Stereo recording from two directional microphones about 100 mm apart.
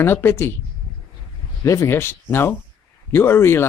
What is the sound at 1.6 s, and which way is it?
Speech, 30° left (ahead or behind).